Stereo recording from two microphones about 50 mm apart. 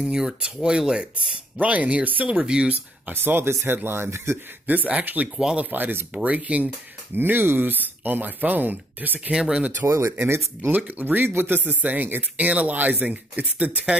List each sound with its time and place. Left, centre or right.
0.0 s speech: centre
1.6 s speech: right
2.7 s speech: right
4.6 s speech: right
6.1 s speech: right
7.2 s speech: right
9.3 s speech: centre
9.8 s speech: right
10.2 s speech: right
10.7 s speech: right